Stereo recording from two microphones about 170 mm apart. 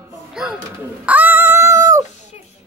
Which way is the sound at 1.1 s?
10° right (ahead or behind).